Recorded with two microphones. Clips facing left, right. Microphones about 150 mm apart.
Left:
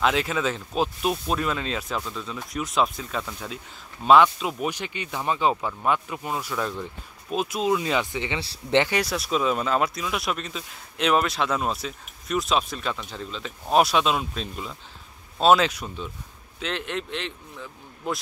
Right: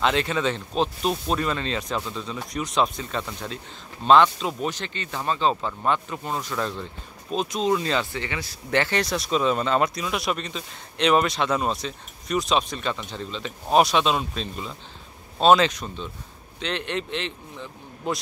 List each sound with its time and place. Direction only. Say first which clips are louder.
0.0 s speech: right 1 dB; 5° left (ahead or behind)
8.4 s speech: left 1 dB; 30° left (ahead or behind)
8.7 s speech: left 1 dB; 10° left (ahead or behind)